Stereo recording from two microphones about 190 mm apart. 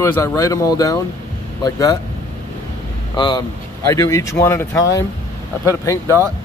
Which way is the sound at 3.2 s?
20° left (ahead or behind).